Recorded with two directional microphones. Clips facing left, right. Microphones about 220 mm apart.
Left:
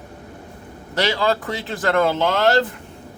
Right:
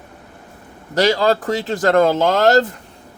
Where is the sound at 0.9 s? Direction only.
40° right (ahead or behind).